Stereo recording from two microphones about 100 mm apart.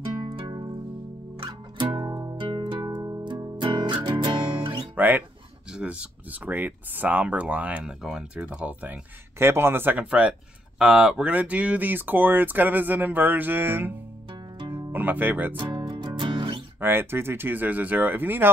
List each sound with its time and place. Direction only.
0.0 s music: 50° right (ahead or behind)
4.9 s music: 15° right (ahead or behind)
5.7 s speech: 10° right (ahead or behind)
9.4 s speech: 25° right (ahead or behind)
15.5 s music: 55° right (ahead or behind)
16.8 s speech: 25° right (ahead or behind)